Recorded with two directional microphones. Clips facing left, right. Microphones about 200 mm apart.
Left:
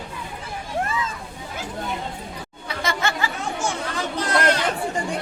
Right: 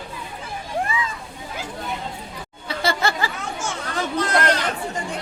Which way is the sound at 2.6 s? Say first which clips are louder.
Right 3 dB; 35° right (ahead or behind).